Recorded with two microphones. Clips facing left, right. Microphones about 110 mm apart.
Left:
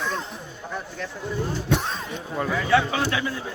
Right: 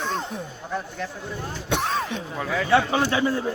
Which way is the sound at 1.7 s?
80° right.